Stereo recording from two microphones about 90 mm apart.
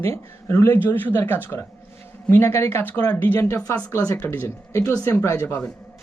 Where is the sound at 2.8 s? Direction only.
20° left (ahead or behind).